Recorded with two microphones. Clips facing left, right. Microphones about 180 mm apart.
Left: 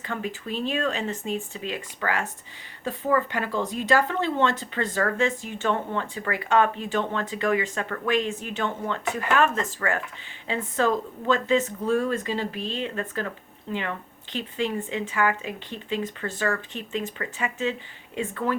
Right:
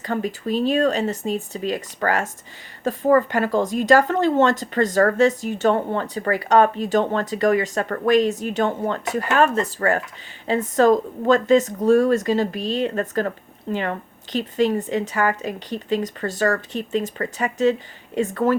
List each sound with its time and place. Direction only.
0.0 s a woman's voice: 40° right (ahead or behind)